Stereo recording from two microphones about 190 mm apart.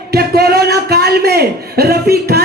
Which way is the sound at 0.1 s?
55° right (ahead or behind).